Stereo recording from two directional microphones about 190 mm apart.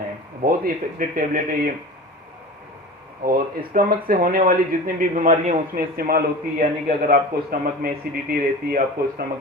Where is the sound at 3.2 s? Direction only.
50° right (ahead or behind).